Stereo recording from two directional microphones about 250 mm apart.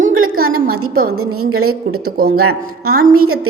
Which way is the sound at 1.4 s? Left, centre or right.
Right.